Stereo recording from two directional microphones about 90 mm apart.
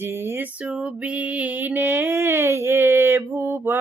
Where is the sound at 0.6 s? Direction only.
10° right (ahead or behind).